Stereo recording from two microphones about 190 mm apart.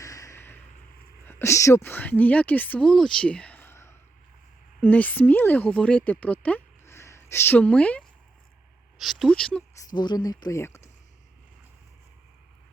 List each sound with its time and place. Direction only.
0.0 s a sound: 15° left (ahead or behind)
1.2 s speech: 10° left (ahead or behind)
9.9 s speech: 25° left (ahead or behind)